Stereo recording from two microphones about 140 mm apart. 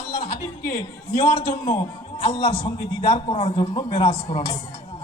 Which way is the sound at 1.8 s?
45° left (ahead or behind).